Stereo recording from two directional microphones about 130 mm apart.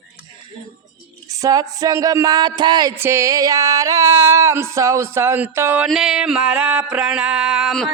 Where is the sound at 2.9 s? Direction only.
20° right (ahead or behind).